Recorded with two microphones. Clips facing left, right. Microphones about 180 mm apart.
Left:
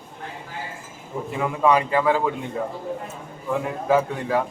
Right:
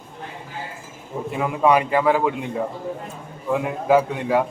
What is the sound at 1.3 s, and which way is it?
Speech, 15° right (ahead or behind).